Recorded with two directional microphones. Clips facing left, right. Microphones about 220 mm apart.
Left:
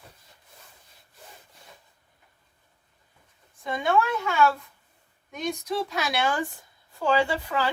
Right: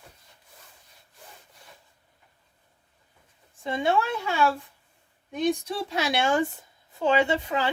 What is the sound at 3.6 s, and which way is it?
A woman's voice, 25° right (ahead or behind).